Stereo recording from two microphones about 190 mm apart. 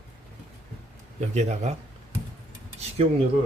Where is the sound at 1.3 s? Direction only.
35° right (ahead or behind).